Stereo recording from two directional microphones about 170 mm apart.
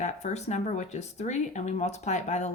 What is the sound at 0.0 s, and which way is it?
Speech, 45° left (ahead or behind).